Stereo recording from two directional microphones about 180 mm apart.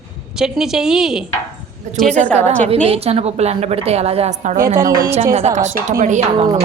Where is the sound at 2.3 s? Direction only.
40° right (ahead or behind).